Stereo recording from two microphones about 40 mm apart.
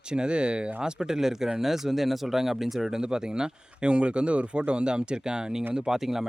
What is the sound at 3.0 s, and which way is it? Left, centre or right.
Speech, centre.